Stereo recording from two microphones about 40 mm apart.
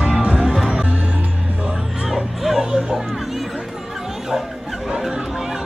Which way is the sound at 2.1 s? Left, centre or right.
Centre.